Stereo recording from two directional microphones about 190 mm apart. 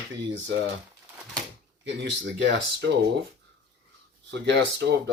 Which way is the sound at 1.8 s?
70° right (ahead or behind).